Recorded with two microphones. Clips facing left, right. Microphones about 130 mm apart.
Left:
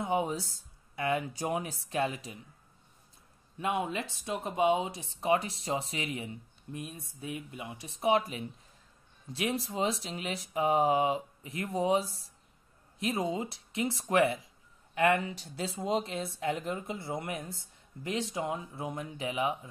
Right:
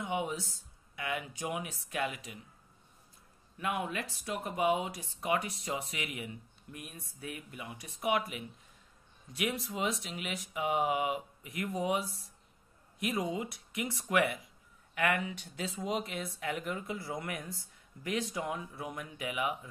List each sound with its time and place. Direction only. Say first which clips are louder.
0.0 s speech: left 4 dB; 35° left (ahead or behind)
3.5 s speech: left 3 dB; 25° left (ahead or behind)